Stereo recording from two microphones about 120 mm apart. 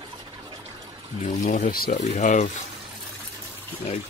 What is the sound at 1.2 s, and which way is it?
Speech, 90° left.